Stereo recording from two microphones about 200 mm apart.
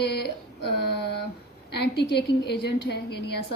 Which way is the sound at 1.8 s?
55° left (ahead or behind).